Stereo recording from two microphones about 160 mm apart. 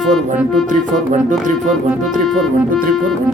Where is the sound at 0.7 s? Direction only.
50° right (ahead or behind).